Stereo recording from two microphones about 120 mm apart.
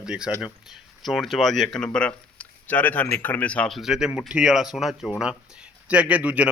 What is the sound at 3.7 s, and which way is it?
Speech, 5° right (ahead or behind).